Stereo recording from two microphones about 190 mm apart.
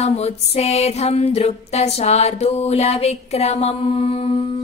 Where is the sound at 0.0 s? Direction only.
35° left (ahead or behind).